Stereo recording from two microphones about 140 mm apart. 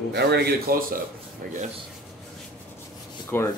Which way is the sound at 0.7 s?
90° right.